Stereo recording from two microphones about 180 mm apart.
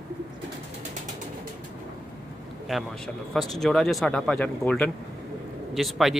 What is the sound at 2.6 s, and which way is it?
Speech, centre (ahead or behind).